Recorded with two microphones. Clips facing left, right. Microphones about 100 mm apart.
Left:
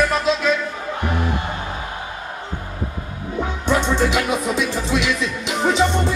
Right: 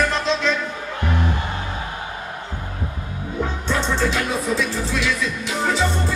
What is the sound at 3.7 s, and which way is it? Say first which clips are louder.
Music: left 4 dB; 15° left (ahead or behind).